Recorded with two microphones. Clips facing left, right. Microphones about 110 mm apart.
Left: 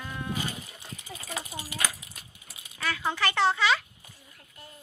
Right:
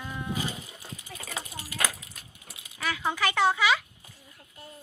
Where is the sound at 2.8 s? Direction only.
10° right (ahead or behind).